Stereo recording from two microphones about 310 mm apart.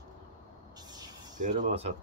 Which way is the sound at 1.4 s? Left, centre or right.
Right.